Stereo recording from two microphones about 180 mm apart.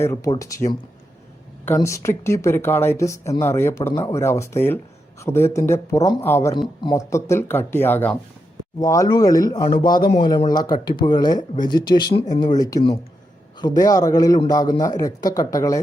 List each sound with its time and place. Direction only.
0.0 s a man's voice: 15° left (ahead or behind)